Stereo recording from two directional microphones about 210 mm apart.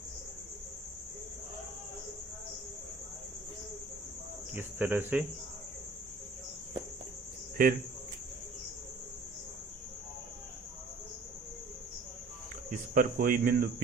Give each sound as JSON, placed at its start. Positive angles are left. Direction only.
{"t": 4.5, "sound": "speech", "side_deg": -10}
{"t": 7.6, "sound": "speech", "side_deg": -40}
{"t": 12.7, "sound": "speech", "side_deg": -40}